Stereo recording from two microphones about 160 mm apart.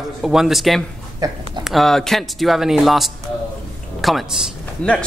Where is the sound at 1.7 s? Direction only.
Centre (ahead or behind).